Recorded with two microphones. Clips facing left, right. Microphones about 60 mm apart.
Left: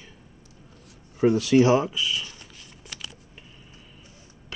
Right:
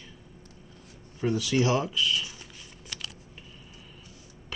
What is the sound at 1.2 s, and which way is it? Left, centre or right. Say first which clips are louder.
Speech: left 7 dB; left.